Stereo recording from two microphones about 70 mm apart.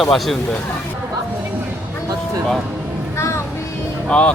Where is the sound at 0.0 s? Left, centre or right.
Centre.